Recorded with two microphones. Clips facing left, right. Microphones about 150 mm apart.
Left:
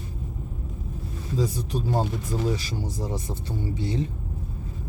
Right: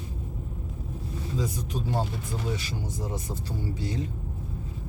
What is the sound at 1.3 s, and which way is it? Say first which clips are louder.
Speech: left 5 dB; 35° left (ahead or behind).